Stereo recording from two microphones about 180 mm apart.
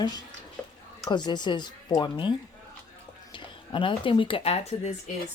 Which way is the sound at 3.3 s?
25° left (ahead or behind).